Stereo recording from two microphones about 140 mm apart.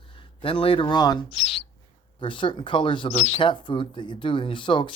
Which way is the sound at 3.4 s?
35° left (ahead or behind).